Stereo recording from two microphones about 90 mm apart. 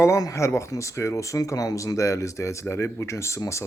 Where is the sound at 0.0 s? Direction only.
35° left (ahead or behind).